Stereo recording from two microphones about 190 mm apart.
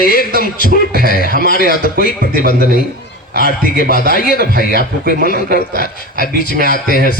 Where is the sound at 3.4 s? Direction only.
50° left (ahead or behind).